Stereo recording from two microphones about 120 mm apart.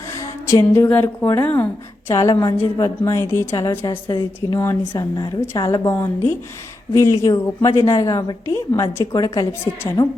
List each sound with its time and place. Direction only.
0.1 s a woman's voice: 25° left (ahead or behind)
3.8 s a woman's voice: 35° left (ahead or behind)
4.6 s a woman's voice: 20° left (ahead or behind)
4.9 s a woman's voice: 35° left (ahead or behind)
5.6 s a woman's voice: 25° left (ahead or behind)